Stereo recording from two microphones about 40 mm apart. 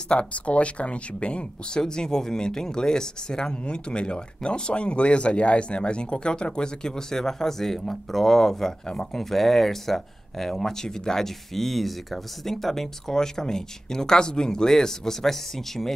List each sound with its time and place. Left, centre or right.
0.1 s speech: left; by 15.9 s centre